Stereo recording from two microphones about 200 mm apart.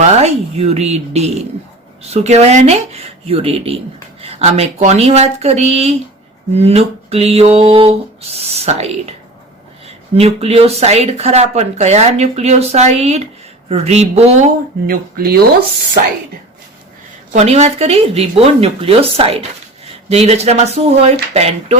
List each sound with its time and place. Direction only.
0.1 s speech: 35° right (ahead or behind)
14.8 s speech: 50° right (ahead or behind)
17.3 s speech: 35° right (ahead or behind)